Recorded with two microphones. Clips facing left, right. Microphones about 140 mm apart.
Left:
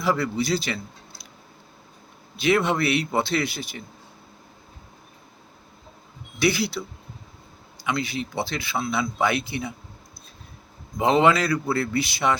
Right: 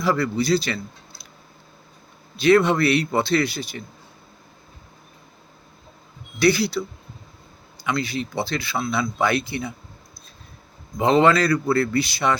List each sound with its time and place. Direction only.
0.0 s a man's voice: 15° left (ahead or behind)
2.3 s a man's voice: 15° left (ahead or behind)
6.4 s a man's voice: 15° left (ahead or behind)
7.9 s a man's voice: 15° left (ahead or behind)
10.9 s a man's voice: 15° left (ahead or behind)